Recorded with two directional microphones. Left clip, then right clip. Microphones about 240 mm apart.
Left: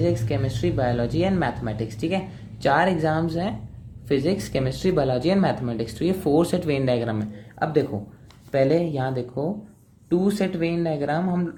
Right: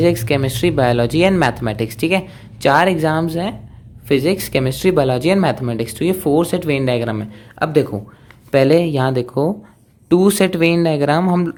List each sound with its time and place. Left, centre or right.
0.0 s speech: right